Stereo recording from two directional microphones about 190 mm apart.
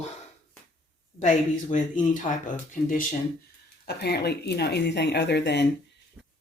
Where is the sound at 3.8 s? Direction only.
60° left (ahead or behind).